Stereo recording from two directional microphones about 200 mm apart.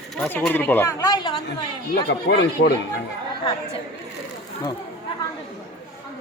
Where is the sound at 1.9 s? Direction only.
60° left (ahead or behind).